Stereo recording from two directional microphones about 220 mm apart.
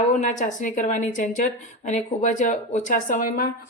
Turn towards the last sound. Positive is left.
turn(degrees=40)  # may be behind; listen again after turning